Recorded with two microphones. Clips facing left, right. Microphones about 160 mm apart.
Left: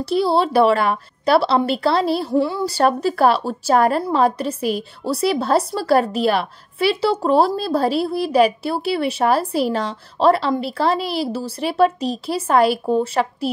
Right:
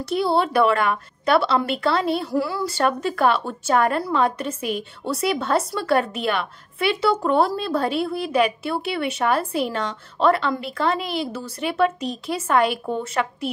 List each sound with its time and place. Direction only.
0.0 s a woman's voice: 30° left (ahead or behind)